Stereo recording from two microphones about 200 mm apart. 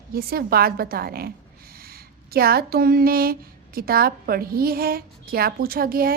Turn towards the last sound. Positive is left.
turn(degrees=-45)  # may be behind; listen again after turning